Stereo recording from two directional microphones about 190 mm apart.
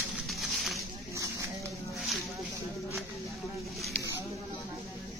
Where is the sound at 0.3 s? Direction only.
Centre (ahead or behind).